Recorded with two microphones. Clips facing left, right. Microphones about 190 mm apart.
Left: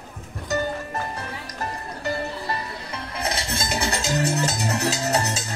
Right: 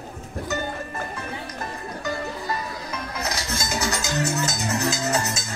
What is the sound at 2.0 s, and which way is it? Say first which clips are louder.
Music: left 2 dB; 30° left (ahead or behind).